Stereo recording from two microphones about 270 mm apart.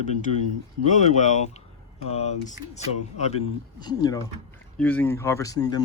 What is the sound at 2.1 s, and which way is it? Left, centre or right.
Speech, left.